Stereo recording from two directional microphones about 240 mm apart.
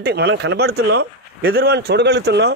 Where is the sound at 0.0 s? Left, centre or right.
Right.